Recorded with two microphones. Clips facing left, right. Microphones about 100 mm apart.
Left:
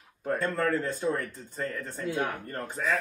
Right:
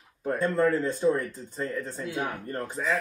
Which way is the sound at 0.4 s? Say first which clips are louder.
Right 5 dB; 15° right (ahead or behind).